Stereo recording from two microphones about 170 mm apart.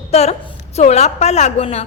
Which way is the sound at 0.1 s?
40° left (ahead or behind).